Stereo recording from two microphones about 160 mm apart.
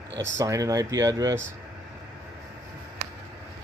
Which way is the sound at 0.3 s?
20° right (ahead or behind).